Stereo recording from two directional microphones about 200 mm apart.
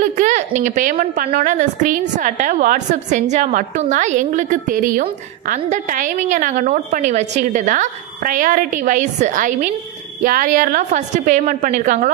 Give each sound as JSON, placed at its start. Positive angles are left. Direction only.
{"t": 0.0, "sound": "a woman's voice", "side_deg": -40}